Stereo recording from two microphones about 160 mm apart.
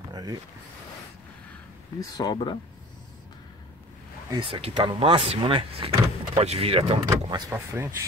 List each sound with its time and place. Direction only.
0.1 s vehicle: 25° right (ahead or behind)
2.0 s speech: 25° left (ahead or behind)
4.3 s speech: 30° right (ahead or behind)
7.1 s speech: 20° right (ahead or behind)